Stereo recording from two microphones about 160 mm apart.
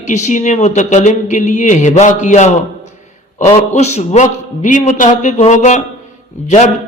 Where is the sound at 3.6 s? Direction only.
45° left (ahead or behind).